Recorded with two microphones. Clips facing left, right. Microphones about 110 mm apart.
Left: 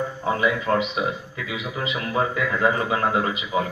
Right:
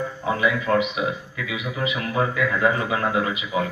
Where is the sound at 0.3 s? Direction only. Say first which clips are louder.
Even; 30° left (ahead or behind).